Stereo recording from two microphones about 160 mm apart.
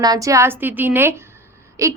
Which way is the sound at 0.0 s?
20° right (ahead or behind).